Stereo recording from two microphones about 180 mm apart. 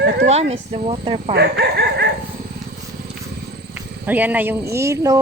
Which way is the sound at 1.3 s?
65° right (ahead or behind).